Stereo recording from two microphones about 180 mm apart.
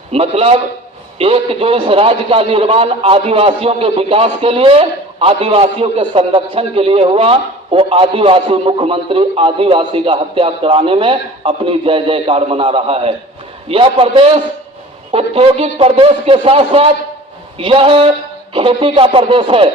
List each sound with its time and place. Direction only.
0.1 s a man's voice: 35° right (ahead or behind)